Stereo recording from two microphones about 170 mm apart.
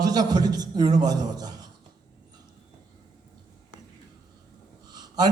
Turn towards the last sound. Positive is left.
turn(degrees=-25)  # may be behind; listen again after turning